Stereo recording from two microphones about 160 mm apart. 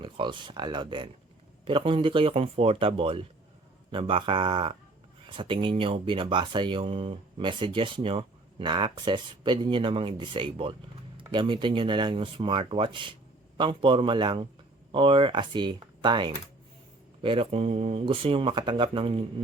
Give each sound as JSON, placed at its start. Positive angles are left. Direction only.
{"t": 0.0, "sound": "speech", "side_deg": -30}